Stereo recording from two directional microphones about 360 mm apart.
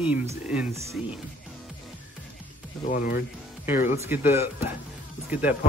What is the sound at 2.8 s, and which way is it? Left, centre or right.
Speech, left.